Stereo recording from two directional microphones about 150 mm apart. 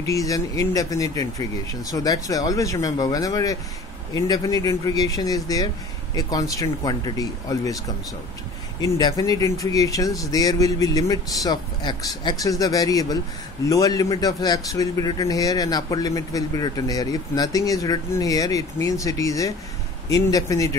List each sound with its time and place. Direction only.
0.0 s speech: 20° left (ahead or behind)
8.8 s speech: 20° left (ahead or behind)